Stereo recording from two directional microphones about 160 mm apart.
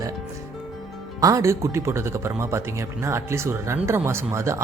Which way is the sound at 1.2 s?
20° right (ahead or behind).